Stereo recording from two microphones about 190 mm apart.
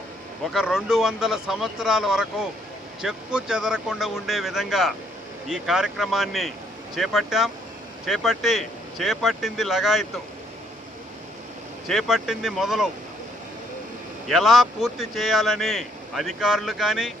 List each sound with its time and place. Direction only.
0.5 s speech: centre (ahead or behind)
11.9 s speech: centre (ahead or behind)
14.3 s speech: centre (ahead or behind)